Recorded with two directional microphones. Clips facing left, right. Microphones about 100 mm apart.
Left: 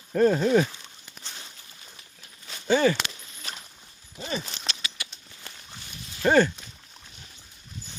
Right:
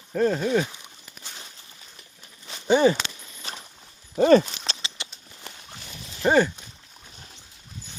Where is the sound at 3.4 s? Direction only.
30° right (ahead or behind).